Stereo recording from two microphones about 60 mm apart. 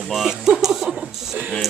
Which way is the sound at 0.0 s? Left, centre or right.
Centre.